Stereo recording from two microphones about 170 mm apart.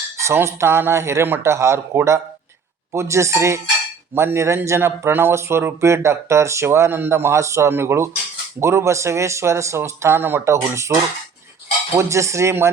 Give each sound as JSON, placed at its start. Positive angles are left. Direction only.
{"t": 0.2, "sound": "a man's voice", "side_deg": -15}
{"t": 11.9, "sound": "a man's voice", "side_deg": -15}